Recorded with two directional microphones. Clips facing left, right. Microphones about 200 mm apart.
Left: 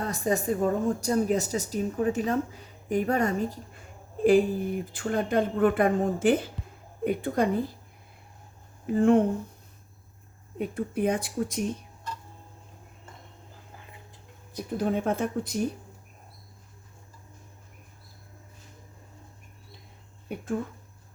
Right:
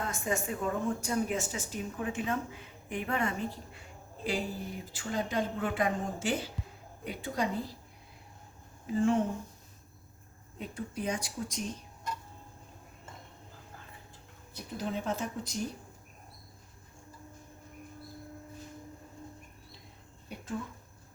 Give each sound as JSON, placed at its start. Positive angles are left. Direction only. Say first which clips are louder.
{"t": 0.0, "sound": "a woman's voice", "louder": "left 6 dB", "side_deg": 35}
{"t": 8.9, "sound": "speech", "louder": "left 7 dB", "side_deg": 55}
{"t": 10.6, "sound": "speech", "louder": "left 10 dB", "side_deg": 55}
{"t": 14.8, "sound": "speech", "louder": "left 7 dB", "side_deg": 55}
{"t": 20.2, "sound": "speech", "louder": "left 8 dB", "side_deg": 50}